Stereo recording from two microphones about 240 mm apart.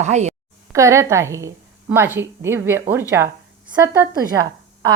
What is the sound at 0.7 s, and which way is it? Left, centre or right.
A woman's voice, centre.